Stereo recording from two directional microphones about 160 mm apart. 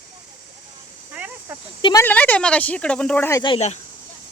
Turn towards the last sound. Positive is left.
turn(degrees=45)  # may be behind; listen again after turning